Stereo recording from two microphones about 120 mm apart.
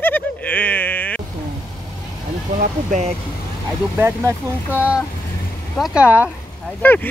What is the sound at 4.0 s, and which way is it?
Speech, 20° right (ahead or behind).